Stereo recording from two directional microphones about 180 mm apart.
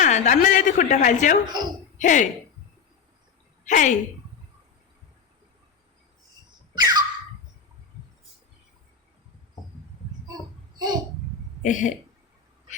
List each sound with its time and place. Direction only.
0.0 s a woman's voice: 45° left (ahead or behind)
3.7 s a woman's voice: 45° left (ahead or behind)
6.7 s a sound: 25° right (ahead or behind)
10.8 s babbling: 25° right (ahead or behind)
11.6 s speech: 45° left (ahead or behind)